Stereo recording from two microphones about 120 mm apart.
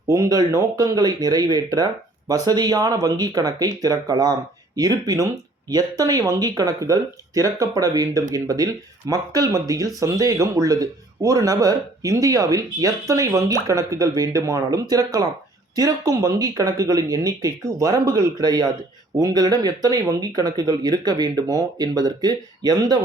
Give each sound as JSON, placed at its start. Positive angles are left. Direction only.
{"t": 0.1, "sound": "speech", "side_deg": -30}